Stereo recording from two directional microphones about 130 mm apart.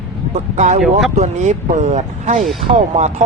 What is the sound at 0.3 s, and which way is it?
Speech, 65° right (ahead or behind).